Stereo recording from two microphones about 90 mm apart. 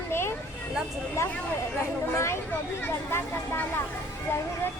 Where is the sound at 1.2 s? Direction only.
35° left (ahead or behind).